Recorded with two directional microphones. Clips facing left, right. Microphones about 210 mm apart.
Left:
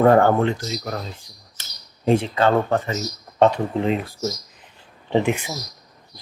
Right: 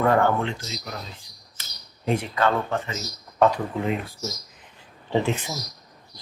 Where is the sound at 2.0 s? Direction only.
25° left (ahead or behind).